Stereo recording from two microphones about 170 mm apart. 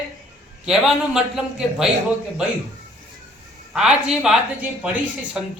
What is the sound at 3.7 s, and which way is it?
Speech, 5° right (ahead or behind).